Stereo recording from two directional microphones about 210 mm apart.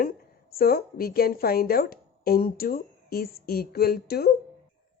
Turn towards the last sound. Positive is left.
turn(degrees=45)  # may be behind; listen again after turning